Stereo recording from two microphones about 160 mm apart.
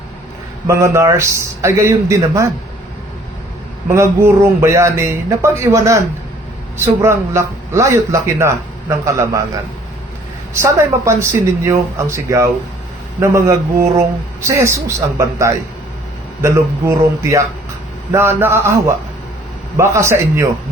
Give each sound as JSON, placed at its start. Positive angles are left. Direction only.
{"t": 0.7, "sound": "a man's voice", "side_deg": -20}
{"t": 3.8, "sound": "a man's voice", "side_deg": -15}
{"t": 10.5, "sound": "a man's voice", "side_deg": -15}